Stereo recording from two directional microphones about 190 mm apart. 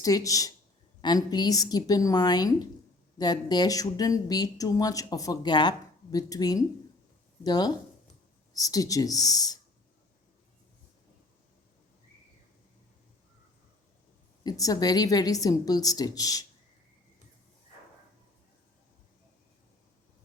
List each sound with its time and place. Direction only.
0.0 s speech: 20° left (ahead or behind)
14.4 s speech: 20° left (ahead or behind)